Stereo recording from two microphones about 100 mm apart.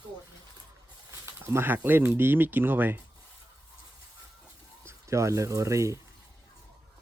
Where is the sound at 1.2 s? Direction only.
25° right (ahead or behind).